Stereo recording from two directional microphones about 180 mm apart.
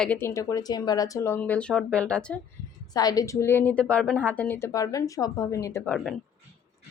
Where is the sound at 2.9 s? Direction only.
20° left (ahead or behind).